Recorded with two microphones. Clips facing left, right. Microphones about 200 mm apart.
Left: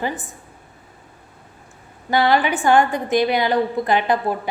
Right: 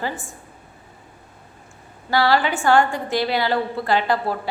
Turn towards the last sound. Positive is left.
turn(degrees=20)  # may be behind; listen again after turning